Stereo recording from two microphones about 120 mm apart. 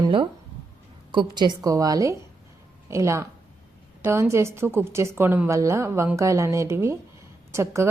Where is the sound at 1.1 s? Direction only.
40° right (ahead or behind).